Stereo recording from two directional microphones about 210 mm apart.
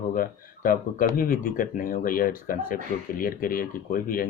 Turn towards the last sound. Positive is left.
turn(degrees=40)  # may be behind; listen again after turning